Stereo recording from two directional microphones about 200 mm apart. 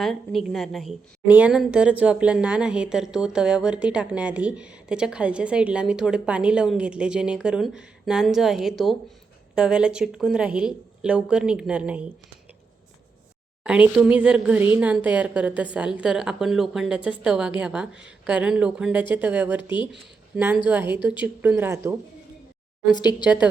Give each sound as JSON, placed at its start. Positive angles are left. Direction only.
{"t": 0.0, "sound": "a woman's voice", "side_deg": 0}
{"t": 13.7, "sound": "a woman's voice", "side_deg": -5}
{"t": 22.9, "sound": "speech", "side_deg": 20}